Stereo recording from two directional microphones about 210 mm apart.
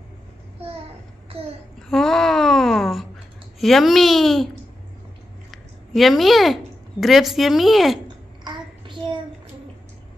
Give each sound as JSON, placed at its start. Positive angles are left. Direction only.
{"t": 1.8, "sound": "a sound", "side_deg": 0}
{"t": 3.5, "sound": "speech", "side_deg": 0}
{"t": 5.5, "sound": "a woman's voice", "side_deg": 0}
{"t": 8.5, "sound": "child singing", "side_deg": -25}